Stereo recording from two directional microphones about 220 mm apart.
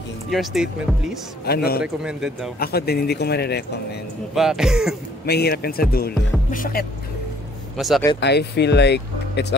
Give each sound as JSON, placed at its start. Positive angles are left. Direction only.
{"t": 0.3, "sound": "speech", "side_deg": 0}
{"t": 1.4, "sound": "speech", "side_deg": 45}
{"t": 2.0, "sound": "speech", "side_deg": -5}
{"t": 2.6, "sound": "speech", "side_deg": 45}
{"t": 4.4, "sound": "speech", "side_deg": 0}
{"t": 5.2, "sound": "speech", "side_deg": 45}
{"t": 7.7, "sound": "speech", "side_deg": 0}
{"t": 8.2, "sound": "speech", "side_deg": 50}